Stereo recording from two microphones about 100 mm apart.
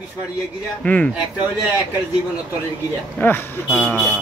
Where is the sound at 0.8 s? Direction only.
15° left (ahead or behind).